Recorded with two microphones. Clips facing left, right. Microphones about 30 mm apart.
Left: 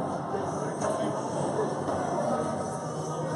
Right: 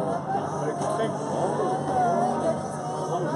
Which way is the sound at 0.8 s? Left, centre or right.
Right.